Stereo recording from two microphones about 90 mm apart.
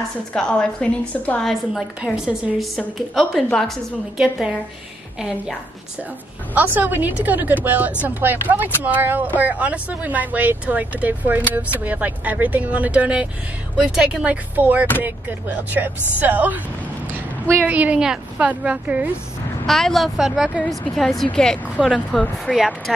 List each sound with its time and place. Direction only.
0.3 s a woman's voice: 10° left (ahead or behind)
1.4 s speech: centre (ahead or behind)
4.2 s speech: 10° right (ahead or behind)
6.5 s speech: 20° right (ahead or behind)
17.1 s a sound: 30° right (ahead or behind)
17.6 s speech: 15° right (ahead or behind)
19.6 s speech: 5° left (ahead or behind)
20.6 s a woman's voice: 5° left (ahead or behind)
21.7 s speech: 5° right (ahead or behind)